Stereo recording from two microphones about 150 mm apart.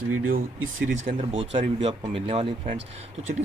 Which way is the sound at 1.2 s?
40° right (ahead or behind).